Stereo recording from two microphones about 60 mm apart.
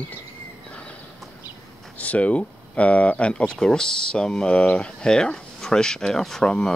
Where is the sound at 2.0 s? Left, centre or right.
Left.